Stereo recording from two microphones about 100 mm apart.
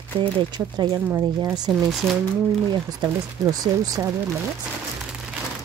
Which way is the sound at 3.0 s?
35° right (ahead or behind).